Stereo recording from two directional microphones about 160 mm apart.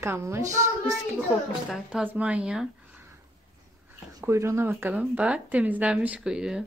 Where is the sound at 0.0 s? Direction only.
15° right (ahead or behind).